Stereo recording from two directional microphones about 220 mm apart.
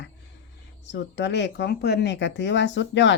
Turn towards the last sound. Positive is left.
turn(degrees=55)  # may be behind; listen again after turning